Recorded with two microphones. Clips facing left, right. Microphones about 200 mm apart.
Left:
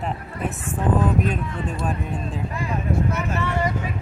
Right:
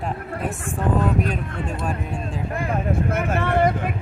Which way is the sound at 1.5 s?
55° right (ahead or behind).